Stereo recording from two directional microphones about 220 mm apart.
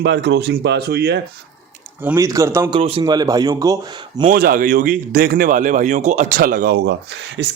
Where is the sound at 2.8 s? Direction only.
25° right (ahead or behind).